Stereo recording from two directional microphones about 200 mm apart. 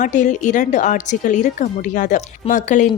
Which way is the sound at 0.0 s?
35° left (ahead or behind).